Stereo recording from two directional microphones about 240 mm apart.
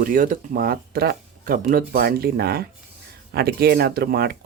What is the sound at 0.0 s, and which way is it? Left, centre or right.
Speech, right.